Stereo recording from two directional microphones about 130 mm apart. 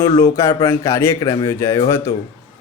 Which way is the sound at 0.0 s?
20° left (ahead or behind).